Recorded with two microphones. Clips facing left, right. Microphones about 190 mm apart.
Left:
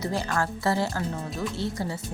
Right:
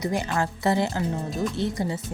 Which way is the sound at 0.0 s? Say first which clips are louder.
Right 2 dB; 15° right (ahead or behind).